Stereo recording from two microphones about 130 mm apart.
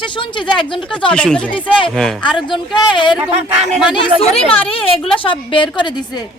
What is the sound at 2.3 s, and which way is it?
Speech, 40° left (ahead or behind).